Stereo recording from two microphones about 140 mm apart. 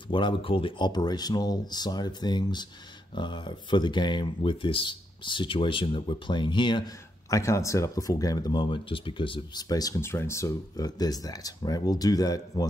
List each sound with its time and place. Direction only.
0.1 s speech: 35° left (ahead or behind)
9.7 s speech: 25° left (ahead or behind)